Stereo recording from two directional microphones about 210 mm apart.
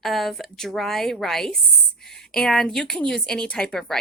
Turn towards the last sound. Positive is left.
turn(degrees=5)  # may be behind; listen again after turning